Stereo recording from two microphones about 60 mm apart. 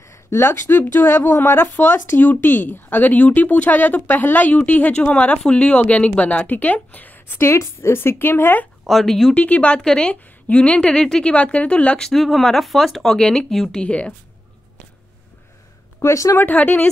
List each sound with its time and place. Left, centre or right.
0.3 s a woman's voice: left
7.3 s speech: left
8.8 s speech: centre
9.3 s a woman's voice: left
12.1 s speech: centre
16.0 s speech: left
16.3 s a woman's voice: left